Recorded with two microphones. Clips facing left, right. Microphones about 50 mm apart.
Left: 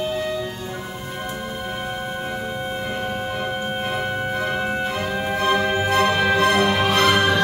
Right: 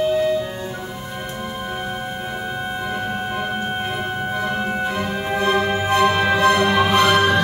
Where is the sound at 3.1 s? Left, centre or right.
Centre.